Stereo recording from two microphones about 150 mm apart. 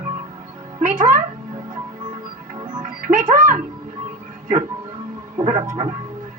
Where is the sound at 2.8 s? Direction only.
60° right (ahead or behind).